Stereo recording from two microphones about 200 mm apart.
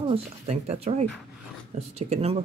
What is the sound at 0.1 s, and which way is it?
Speech, 35° right (ahead or behind).